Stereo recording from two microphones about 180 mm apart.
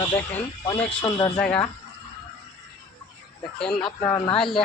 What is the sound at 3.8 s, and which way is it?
Speech, 20° left (ahead or behind).